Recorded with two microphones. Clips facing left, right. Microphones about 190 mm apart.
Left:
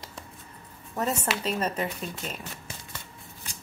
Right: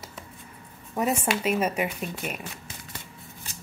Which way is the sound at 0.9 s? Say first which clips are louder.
Right 3 dB; 10° right (ahead or behind).